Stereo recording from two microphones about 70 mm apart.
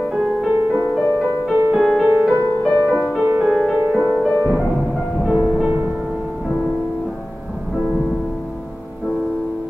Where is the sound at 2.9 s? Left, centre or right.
Centre.